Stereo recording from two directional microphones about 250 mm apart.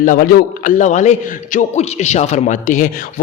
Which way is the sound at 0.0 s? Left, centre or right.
Left.